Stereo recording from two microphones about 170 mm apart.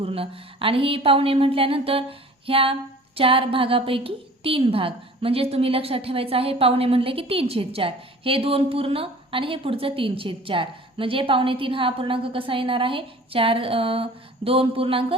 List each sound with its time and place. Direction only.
0.0 s a woman's voice: 35° right (ahead or behind)